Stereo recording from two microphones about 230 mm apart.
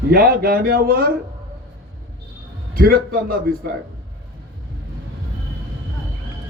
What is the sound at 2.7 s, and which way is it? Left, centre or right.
Speech, right.